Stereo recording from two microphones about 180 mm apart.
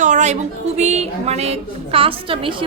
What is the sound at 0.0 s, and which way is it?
Music, 40° right (ahead or behind).